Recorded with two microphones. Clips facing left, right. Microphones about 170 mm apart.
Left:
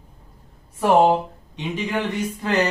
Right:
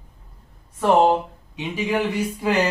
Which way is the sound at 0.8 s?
10° left (ahead or behind).